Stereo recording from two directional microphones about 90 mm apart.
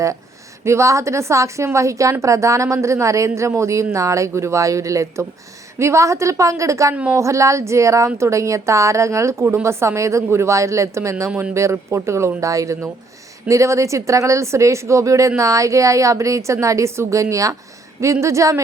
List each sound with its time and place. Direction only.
0.6 s speech: 30° right (ahead or behind)
6.9 s a woman's voice: 15° right (ahead or behind)
7.2 s speech: 35° right (ahead or behind)